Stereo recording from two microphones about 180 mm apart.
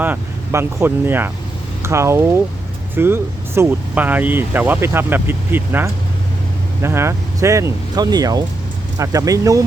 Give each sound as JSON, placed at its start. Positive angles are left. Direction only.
{"t": 0.0, "sound": "speech", "side_deg": -10}